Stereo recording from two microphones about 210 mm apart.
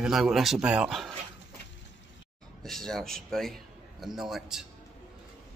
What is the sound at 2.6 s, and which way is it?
A man's voice, centre (ahead or behind).